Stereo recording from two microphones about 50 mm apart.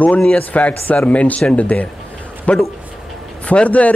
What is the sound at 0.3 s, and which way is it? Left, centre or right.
Speech, left.